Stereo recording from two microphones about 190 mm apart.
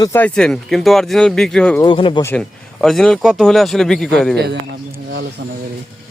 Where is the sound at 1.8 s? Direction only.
25° left (ahead or behind).